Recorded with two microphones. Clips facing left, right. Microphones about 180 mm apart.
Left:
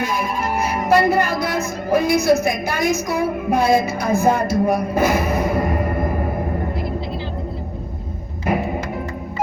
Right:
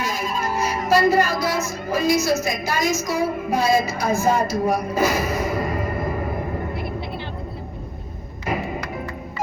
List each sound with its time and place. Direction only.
0.0 s music: 55° left (ahead or behind)